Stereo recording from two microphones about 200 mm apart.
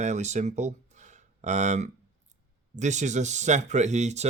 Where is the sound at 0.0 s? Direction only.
35° right (ahead or behind).